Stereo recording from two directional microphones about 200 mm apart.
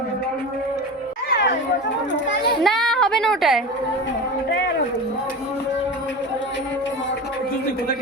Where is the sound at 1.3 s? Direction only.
60° left (ahead or behind).